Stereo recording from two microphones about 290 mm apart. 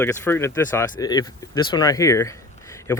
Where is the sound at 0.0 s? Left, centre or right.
Centre.